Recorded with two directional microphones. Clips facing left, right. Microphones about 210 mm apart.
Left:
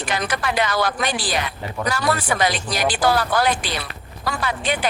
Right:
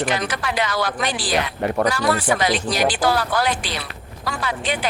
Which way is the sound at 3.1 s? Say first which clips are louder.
Left 1 dB; 50° left (ahead or behind).